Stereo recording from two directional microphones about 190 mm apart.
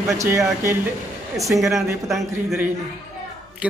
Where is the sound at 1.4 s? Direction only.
Centre (ahead or behind).